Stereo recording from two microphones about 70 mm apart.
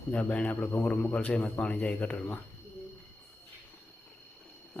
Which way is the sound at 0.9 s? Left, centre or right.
Centre.